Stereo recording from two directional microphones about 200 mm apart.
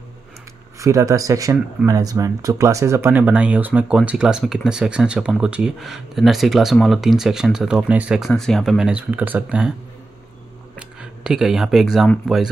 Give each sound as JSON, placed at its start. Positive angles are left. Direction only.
{"t": 0.7, "sound": "speech", "side_deg": -15}
{"t": 11.0, "sound": "speech", "side_deg": -5}